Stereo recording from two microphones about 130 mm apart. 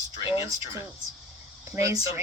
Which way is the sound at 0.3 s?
35° left (ahead or behind).